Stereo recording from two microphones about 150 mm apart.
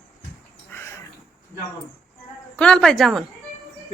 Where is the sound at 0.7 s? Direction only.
15° left (ahead or behind).